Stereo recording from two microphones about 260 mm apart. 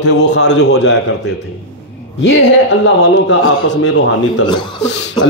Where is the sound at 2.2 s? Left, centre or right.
Left.